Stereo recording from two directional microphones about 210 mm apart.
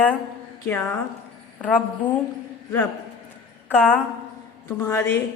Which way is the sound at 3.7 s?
5° left (ahead or behind).